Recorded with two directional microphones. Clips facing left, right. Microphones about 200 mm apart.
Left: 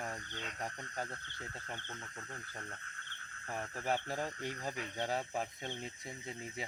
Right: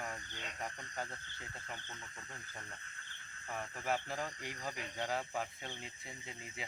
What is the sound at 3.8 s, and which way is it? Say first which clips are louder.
Speech: left 2 dB; 35° left (ahead or behind).